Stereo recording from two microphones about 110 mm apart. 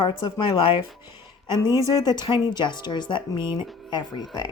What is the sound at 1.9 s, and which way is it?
Speech, 40° left (ahead or behind).